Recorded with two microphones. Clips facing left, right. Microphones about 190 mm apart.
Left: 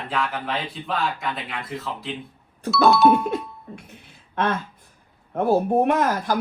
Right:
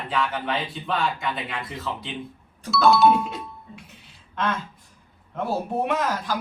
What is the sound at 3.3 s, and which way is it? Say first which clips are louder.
Music: left 8 dB; 55° left (ahead or behind).